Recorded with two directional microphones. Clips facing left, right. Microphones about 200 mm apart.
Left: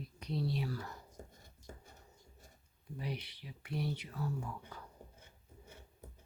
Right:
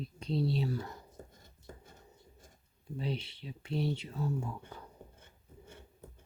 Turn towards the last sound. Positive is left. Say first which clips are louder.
# right 4 dB
turn(degrees=-25)  # may be behind; listen again after turning